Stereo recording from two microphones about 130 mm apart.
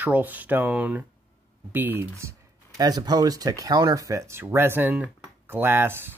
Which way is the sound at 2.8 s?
30° right (ahead or behind).